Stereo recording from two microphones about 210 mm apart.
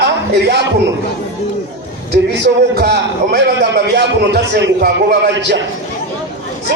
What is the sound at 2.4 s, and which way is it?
A man's voice, 50° right (ahead or behind).